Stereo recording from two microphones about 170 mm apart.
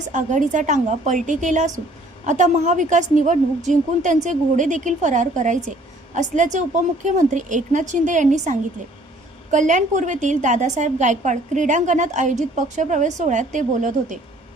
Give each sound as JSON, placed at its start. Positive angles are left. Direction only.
{"t": 0.1, "sound": "a woman's voice", "side_deg": -45}